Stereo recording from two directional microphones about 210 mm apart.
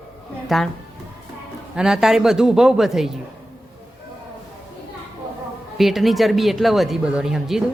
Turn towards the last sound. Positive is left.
turn(degrees=0)  # may be behind; listen again after turning